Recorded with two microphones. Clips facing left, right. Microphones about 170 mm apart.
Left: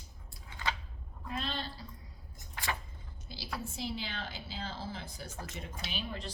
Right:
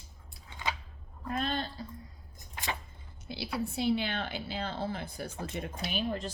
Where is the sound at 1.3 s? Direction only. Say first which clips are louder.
Right 5 dB; 50° right (ahead or behind).